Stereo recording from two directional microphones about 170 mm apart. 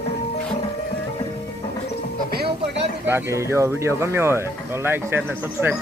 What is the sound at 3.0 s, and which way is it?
Speech, 15° right (ahead or behind).